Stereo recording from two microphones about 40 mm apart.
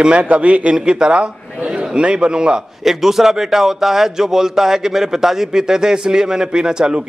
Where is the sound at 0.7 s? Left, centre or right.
Right.